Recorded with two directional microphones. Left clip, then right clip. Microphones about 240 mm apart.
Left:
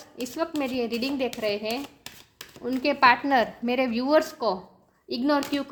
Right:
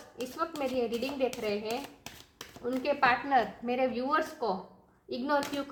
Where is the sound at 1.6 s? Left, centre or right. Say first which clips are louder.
Left 5 dB; left.